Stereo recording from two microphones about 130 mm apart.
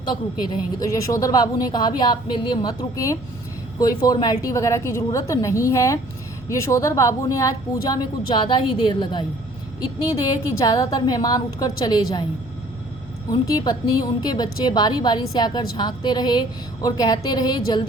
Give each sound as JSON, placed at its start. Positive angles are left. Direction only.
{"t": 0.1, "sound": "a woman's voice", "side_deg": 30}
{"t": 8.4, "sound": "a woman's voice", "side_deg": 35}
{"t": 13.5, "sound": "a woman's voice", "side_deg": 30}